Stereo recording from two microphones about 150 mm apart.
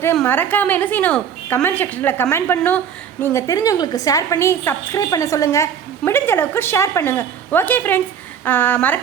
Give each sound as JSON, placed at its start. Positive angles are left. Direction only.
{"t": 0.3, "sound": "a woman's voice", "side_deg": 10}